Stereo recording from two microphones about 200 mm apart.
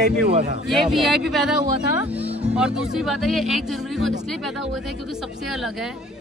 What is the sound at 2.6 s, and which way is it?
Speech, 5° right (ahead or behind).